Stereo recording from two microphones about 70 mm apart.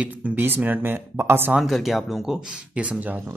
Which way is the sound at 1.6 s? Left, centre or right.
Centre.